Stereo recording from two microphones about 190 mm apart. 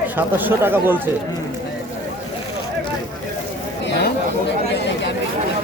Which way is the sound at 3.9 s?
60° left (ahead or behind).